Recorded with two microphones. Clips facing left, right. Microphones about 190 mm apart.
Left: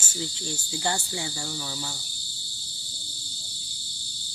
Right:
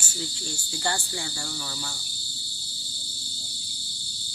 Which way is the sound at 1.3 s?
10° left (ahead or behind).